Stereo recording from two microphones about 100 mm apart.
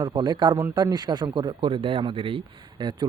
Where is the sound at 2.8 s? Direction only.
45° right (ahead or behind).